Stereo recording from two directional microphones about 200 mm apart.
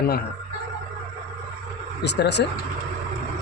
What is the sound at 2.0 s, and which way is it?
Speech, 60° left (ahead or behind).